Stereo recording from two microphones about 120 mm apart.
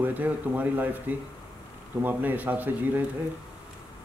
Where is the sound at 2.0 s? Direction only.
15° right (ahead or behind).